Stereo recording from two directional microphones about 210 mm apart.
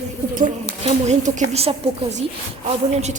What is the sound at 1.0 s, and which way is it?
A woman's voice, 35° right (ahead or behind).